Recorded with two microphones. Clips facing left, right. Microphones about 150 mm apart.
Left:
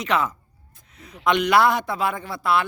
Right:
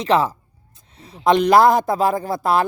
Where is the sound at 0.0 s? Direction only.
30° right (ahead or behind).